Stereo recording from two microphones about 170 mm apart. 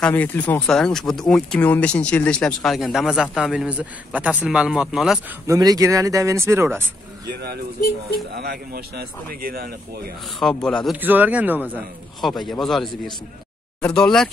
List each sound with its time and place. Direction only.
0.0 s speech: 10° left (ahead or behind)
5.5 s speech: 20° right (ahead or behind)
8.4 s a man's voice: 70° right (ahead or behind)
10.6 s speech: 5° left (ahead or behind)
11.0 s speech: 10° right (ahead or behind)
12.2 s speech: centre (ahead or behind)